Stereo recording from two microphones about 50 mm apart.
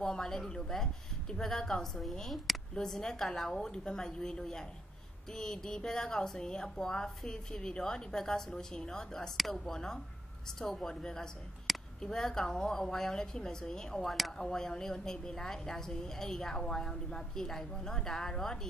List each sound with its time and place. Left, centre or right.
0.0 s a woman's voice: centre
11.7 s a sound: centre
12.0 s a woman's voice: centre